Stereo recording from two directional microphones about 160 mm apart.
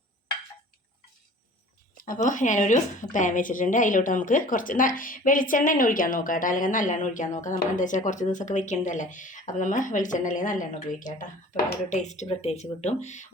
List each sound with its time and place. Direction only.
2.0 s a woman's voice: 55° left (ahead or behind)